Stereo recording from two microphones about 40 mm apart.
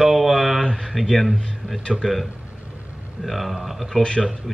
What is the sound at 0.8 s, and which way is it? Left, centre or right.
Speech, centre.